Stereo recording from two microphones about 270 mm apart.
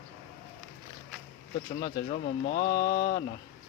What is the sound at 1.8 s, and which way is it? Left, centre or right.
Speech, left.